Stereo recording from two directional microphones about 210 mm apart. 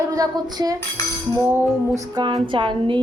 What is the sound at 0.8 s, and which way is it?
Cutlery, 15° left (ahead or behind).